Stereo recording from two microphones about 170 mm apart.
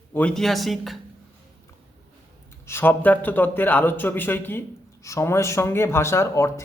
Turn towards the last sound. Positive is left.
turn(degrees=15)  # may be behind; listen again after turning